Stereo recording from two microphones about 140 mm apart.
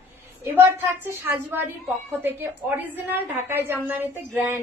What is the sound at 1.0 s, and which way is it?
A woman's voice, 15° right (ahead or behind).